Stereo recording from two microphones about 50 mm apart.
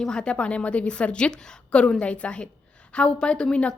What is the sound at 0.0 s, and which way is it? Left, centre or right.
A woman's voice, centre.